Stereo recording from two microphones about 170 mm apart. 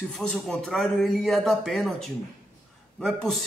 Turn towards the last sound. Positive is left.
turn(degrees=0)  # may be behind; listen again after turning